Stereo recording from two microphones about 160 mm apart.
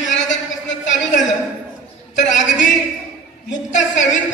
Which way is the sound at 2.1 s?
50° left (ahead or behind).